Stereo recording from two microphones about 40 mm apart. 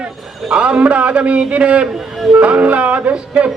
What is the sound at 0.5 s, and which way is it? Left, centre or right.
Music, right.